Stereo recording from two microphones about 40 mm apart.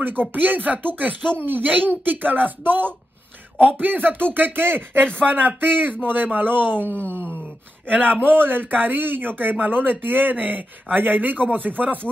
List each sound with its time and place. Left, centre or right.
0.0 s a man's voice: right
6.8 s speech: right
7.9 s a man's voice: right